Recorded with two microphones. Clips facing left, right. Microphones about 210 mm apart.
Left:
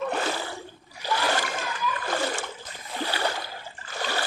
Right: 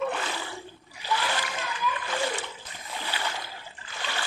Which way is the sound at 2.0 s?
45° left (ahead or behind).